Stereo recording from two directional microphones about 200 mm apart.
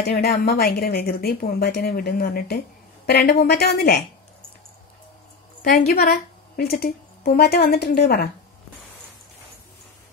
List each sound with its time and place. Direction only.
0.0 s a woman's voice: 55° left (ahead or behind)
5.6 s a woman's voice: 50° left (ahead or behind)